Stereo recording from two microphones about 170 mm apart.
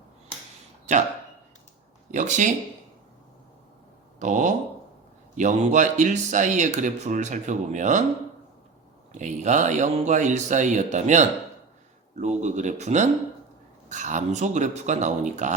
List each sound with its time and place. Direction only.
0.9 s speech: 45° right (ahead or behind)
2.0 s speech: 45° right (ahead or behind)
4.2 s speech: 45° right (ahead or behind)
9.1 s speech: 45° right (ahead or behind)